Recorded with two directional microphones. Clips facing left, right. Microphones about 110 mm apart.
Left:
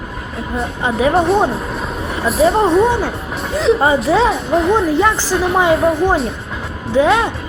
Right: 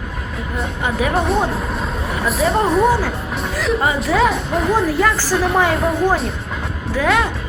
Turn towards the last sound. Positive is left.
turn(degrees=25)  # may be behind; listen again after turning